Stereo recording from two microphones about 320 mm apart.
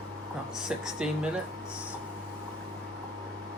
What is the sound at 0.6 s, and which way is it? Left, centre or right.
Speech, centre.